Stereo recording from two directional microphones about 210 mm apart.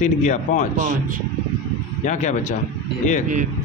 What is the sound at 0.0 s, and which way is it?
Speech, 35° left (ahead or behind).